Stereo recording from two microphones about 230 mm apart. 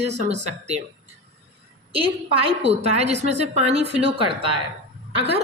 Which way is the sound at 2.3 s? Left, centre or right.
Right.